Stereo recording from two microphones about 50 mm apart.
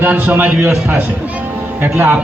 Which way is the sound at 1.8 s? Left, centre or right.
Right.